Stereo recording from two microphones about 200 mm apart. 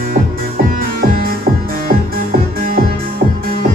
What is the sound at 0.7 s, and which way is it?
Music, 45° right (ahead or behind).